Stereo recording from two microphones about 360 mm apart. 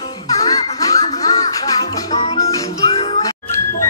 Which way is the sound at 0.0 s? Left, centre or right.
Centre.